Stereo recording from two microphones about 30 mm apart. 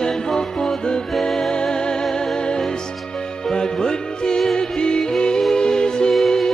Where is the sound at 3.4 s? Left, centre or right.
Left.